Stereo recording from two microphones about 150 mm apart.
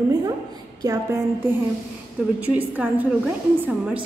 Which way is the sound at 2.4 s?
10° right (ahead or behind).